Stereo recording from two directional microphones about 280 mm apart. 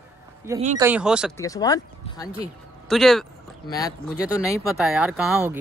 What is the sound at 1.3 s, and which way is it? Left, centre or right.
Speech, centre.